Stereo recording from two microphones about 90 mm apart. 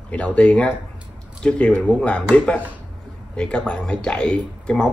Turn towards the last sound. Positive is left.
turn(degrees=10)  # may be behind; listen again after turning